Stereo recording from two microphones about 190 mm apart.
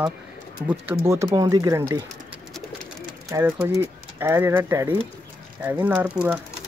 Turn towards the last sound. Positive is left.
turn(degrees=-5)  # may be behind; listen again after turning